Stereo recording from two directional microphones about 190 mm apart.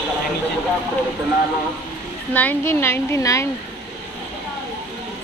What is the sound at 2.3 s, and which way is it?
Speech, 10° left (ahead or behind).